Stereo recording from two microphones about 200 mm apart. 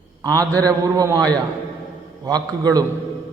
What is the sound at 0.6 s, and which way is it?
A man's voice, 20° right (ahead or behind).